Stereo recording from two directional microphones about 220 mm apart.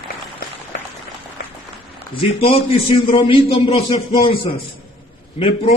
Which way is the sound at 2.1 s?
25° left (ahead or behind).